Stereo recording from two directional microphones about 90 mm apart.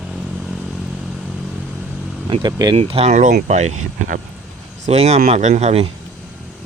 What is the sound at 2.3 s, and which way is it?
Speech, 65° right (ahead or behind).